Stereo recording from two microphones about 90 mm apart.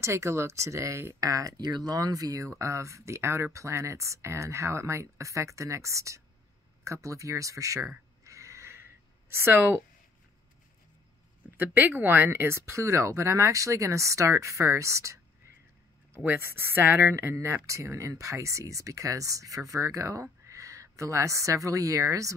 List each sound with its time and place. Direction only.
0.0 s speech: 30° right (ahead or behind)
8.2 s a sound: 35° right (ahead or behind)
11.5 s speech: 20° right (ahead or behind)
16.3 s speech: 25° right (ahead or behind)